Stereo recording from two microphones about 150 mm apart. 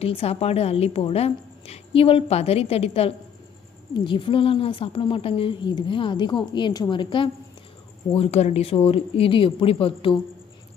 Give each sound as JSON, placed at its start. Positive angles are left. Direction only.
{"t": 0.0, "sound": "a woman's voice", "side_deg": 40}